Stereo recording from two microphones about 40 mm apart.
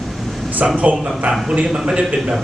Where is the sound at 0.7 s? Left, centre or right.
Right.